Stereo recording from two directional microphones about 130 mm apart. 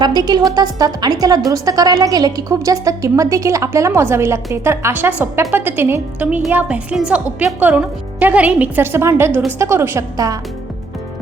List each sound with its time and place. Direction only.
0.0 s a woman's voice: 30° right (ahead or behind)